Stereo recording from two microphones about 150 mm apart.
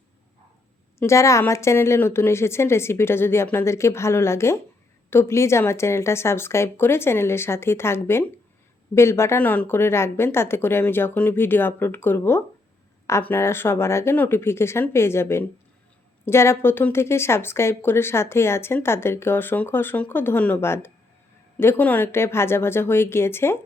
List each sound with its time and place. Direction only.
0.9 s speech: 20° left (ahead or behind)